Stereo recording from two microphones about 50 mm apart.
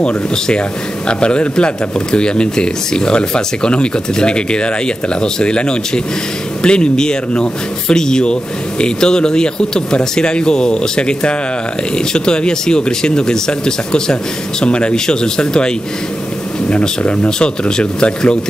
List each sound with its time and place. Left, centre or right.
0.0 s a man's voice: centre